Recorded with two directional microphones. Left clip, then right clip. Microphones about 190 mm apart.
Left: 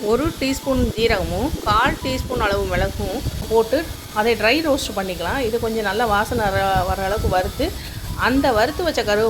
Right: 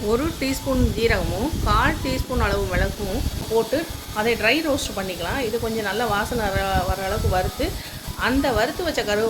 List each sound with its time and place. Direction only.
0.1 s speech: 20° left (ahead or behind)